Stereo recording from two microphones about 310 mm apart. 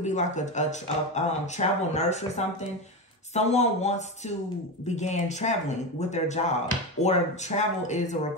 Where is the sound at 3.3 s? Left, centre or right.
Left.